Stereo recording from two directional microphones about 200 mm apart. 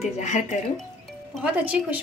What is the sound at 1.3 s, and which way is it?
Speech, 5° right (ahead or behind).